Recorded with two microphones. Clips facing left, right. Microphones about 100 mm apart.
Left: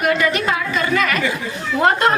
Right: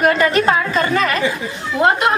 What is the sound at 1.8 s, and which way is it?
Speech, 20° right (ahead or behind).